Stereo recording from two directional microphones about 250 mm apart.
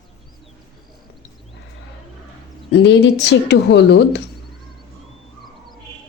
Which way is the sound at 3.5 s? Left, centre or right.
Left.